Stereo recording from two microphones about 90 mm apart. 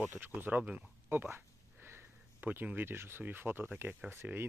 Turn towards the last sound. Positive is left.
turn(degrees=-25)  # may be behind; listen again after turning